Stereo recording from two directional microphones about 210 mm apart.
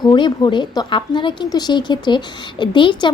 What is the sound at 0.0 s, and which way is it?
Speech, 20° left (ahead or behind).